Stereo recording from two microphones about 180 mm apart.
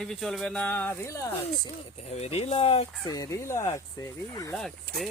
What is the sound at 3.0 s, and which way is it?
Speech, 20° left (ahead or behind).